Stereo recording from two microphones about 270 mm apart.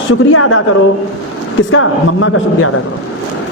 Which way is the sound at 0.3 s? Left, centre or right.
Left.